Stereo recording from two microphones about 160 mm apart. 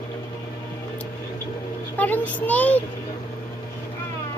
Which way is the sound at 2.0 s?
10° left (ahead or behind).